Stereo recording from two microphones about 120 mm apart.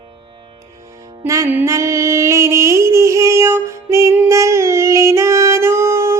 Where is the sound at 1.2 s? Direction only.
25° right (ahead or behind).